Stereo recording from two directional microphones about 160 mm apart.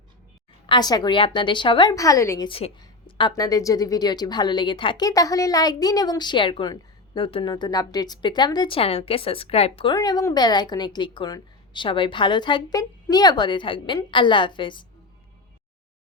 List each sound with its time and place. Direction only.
0.7 s a woman's voice: 25° left (ahead or behind)
2.5 s speech: 40° left (ahead or behind)
2.8 s a woman's voice: 25° left (ahead or behind)
9.9 s a woman's voice: 25° left (ahead or behind)